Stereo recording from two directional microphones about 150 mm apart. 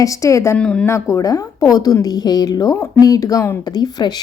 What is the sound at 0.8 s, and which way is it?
A woman's voice, 20° left (ahead or behind).